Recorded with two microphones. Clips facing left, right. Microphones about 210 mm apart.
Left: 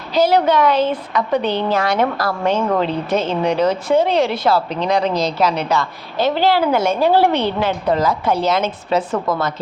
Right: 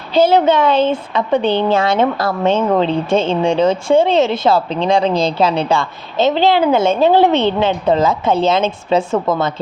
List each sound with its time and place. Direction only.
0.1 s a woman's voice: 25° right (ahead or behind)